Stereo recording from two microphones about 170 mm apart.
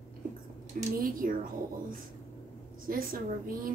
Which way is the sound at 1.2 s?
60° right (ahead or behind).